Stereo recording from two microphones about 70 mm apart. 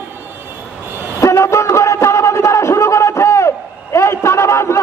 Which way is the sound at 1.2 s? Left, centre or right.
Left.